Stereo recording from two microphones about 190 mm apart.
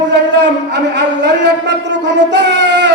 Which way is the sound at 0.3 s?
65° right (ahead or behind).